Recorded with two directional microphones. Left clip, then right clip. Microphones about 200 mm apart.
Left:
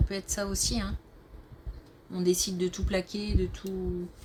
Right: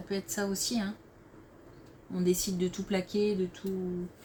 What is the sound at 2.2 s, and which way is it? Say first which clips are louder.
Speech: left 2 dB; 45° left (ahead or behind).